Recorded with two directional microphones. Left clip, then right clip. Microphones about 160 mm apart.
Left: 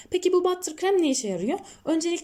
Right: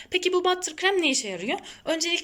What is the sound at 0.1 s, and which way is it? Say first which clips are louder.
Speech: left 1 dB; 40° left (ahead or behind).